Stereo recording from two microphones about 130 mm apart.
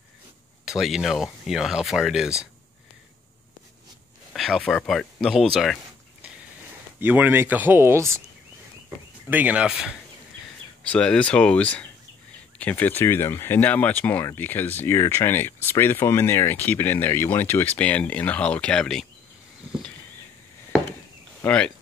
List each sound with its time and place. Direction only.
0.7 s speech: centre (ahead or behind)
4.3 s speech: centre (ahead or behind)
7.0 s speech: 15° right (ahead or behind)
9.3 s speech: 10° right (ahead or behind)
10.9 s speech: 10° left (ahead or behind)
21.5 s speech: 5° left (ahead or behind)